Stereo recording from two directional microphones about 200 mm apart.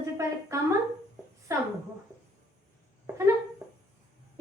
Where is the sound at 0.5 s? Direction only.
15° right (ahead or behind).